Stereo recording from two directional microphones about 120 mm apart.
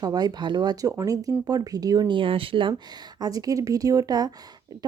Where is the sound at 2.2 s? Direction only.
50° right (ahead or behind).